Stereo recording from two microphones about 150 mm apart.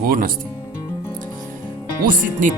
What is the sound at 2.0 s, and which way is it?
Speech, 60° right (ahead or behind).